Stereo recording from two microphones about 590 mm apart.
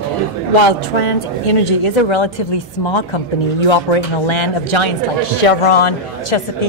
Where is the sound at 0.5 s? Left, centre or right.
Left.